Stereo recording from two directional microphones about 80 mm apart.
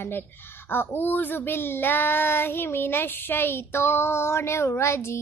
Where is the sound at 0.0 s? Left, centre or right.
Left.